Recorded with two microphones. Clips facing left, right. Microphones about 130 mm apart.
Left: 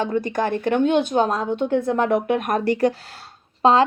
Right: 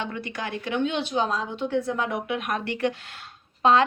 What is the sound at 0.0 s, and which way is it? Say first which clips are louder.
Speech: left 10 dB; 40° left (ahead or behind).